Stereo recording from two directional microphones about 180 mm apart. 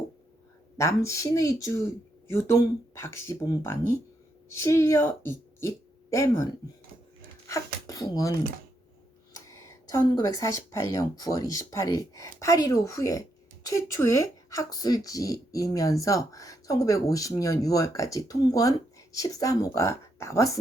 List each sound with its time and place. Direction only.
0.8 s speech: 15° left (ahead or behind)
7.4 s a sound: 15° left (ahead or behind)
9.5 s speech: 15° left (ahead or behind)